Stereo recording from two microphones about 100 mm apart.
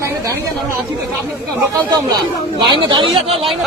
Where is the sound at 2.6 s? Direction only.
50° right (ahead or behind).